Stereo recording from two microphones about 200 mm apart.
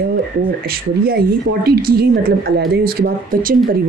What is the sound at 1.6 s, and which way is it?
Speech, 50° right (ahead or behind).